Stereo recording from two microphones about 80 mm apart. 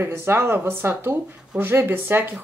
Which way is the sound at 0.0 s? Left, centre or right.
Right.